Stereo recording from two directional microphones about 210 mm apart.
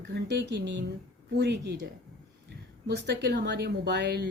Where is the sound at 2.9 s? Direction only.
55° right (ahead or behind).